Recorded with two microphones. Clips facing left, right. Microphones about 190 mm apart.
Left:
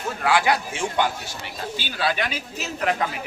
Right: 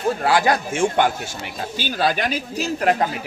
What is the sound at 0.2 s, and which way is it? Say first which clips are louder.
A man's voice: right 3 dB; 40° right (ahead or behind).